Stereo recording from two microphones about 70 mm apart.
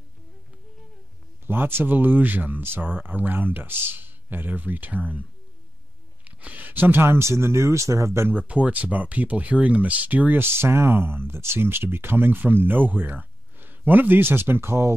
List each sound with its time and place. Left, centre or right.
1.5 s speech: right
6.2 s speech: right
8.3 s speech: right